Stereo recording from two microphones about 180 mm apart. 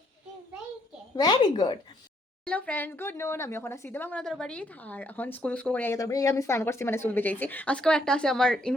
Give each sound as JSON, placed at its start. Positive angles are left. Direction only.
{"t": 1.1, "sound": "speech", "side_deg": 25}
{"t": 2.5, "sound": "speech", "side_deg": 10}